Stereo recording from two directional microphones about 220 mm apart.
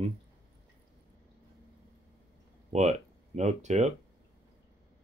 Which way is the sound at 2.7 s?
30° right (ahead or behind).